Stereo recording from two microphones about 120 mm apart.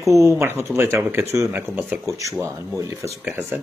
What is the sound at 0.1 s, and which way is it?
Speech, 25° right (ahead or behind).